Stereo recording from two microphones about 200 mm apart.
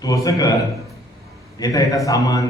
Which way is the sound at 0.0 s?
20° left (ahead or behind).